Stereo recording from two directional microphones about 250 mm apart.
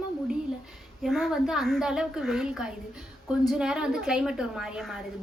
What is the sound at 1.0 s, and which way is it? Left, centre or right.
A woman's voice, centre.